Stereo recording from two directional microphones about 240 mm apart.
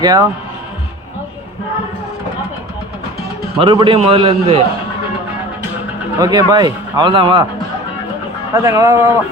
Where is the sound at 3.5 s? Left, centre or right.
Right.